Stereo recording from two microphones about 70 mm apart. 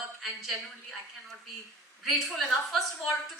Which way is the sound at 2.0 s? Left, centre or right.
Centre.